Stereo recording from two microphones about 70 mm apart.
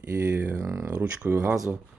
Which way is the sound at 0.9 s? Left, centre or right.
Right.